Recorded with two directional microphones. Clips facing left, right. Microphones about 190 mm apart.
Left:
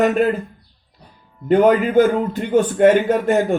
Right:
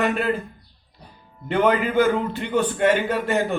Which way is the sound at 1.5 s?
45° left (ahead or behind).